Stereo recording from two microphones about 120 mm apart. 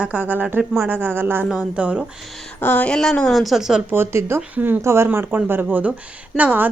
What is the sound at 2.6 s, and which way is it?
A woman's voice, 15° left (ahead or behind).